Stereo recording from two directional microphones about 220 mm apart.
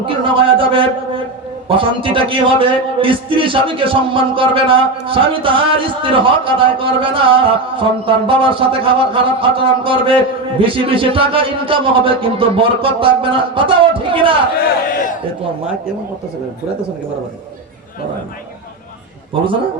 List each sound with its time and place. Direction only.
0.0 s a man's voice: 25° right (ahead or behind)